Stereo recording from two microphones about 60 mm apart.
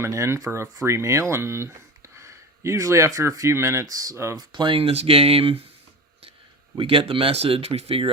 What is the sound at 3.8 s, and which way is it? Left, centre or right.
Speech, right.